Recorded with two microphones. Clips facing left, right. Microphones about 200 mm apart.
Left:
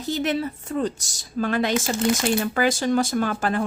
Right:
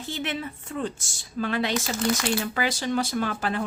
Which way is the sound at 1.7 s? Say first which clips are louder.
Left 4 dB; 25° left (ahead or behind).